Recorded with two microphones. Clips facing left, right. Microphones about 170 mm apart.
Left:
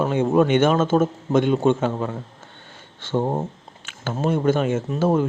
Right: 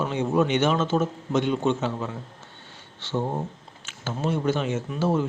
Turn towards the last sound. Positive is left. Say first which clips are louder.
# left 4 dB
turn(degrees=50)  # may be behind; listen again after turning